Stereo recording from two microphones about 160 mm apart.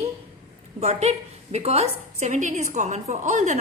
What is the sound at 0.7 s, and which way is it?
A woman's voice, 40° right (ahead or behind).